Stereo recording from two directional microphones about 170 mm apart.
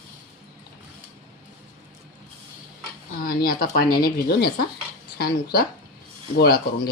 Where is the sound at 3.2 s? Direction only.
60° left (ahead or behind).